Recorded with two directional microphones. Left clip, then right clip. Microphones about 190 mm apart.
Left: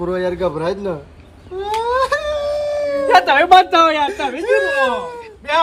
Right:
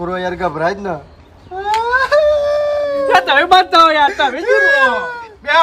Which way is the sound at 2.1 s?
5° right (ahead or behind).